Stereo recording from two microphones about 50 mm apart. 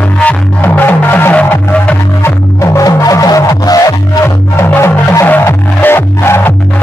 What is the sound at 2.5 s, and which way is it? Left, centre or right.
Music, left.